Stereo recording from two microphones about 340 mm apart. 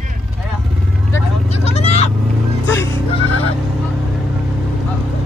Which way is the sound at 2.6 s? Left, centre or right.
Centre.